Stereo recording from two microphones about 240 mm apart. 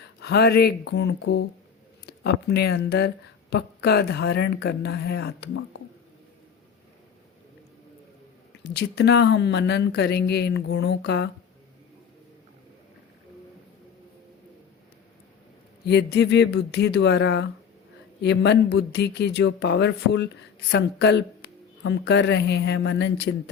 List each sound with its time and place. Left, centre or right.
0.0 s speech: left
8.7 s speech: left
15.8 s speech: left